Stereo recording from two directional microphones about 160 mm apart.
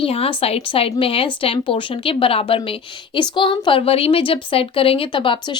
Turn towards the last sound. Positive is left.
turn(degrees=30)  # may be behind; listen again after turning